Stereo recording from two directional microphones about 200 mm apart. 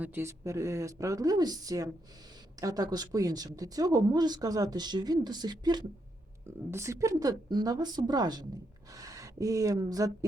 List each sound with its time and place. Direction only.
0.0 s speech: 10° right (ahead or behind)